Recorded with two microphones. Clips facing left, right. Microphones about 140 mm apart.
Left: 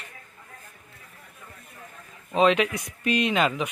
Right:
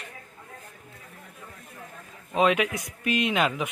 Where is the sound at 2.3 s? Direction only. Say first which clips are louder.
Left 2 dB; 5° right (ahead or behind).